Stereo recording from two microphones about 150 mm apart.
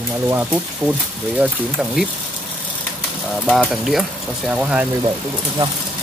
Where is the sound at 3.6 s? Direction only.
Centre (ahead or behind).